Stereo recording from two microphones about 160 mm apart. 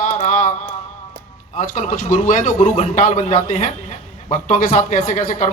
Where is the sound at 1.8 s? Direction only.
55° left (ahead or behind).